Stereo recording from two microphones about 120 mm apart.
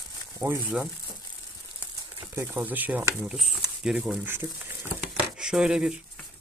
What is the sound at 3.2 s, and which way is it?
Speech, 5° right (ahead or behind).